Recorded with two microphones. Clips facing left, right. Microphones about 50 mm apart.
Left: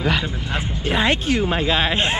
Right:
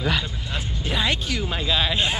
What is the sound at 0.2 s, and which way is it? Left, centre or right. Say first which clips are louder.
Speech: left 5 dB; left.